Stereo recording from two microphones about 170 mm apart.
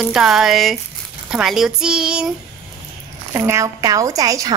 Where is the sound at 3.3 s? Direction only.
15° right (ahead or behind).